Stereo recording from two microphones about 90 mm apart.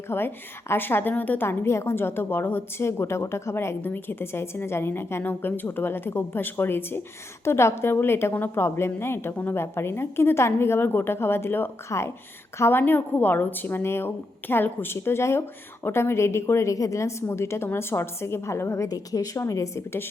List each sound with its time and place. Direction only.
0.1 s a woman's voice: 25° left (ahead or behind)